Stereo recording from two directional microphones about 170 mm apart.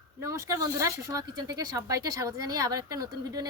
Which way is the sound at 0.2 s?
15° right (ahead or behind).